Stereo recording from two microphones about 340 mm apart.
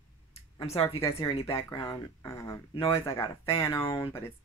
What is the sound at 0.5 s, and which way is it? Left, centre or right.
Speech, centre.